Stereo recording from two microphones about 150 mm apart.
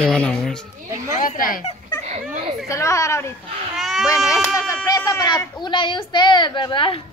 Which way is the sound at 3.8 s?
Centre (ahead or behind).